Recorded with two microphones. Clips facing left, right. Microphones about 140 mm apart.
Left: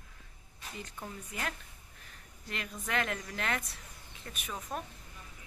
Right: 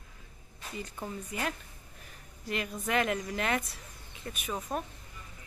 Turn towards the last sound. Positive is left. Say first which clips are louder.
# right 4 dB
turn(degrees=-35)  # may be behind; listen again after turning